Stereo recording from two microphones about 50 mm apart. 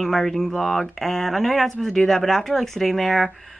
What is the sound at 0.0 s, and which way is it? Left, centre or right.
Speech, centre.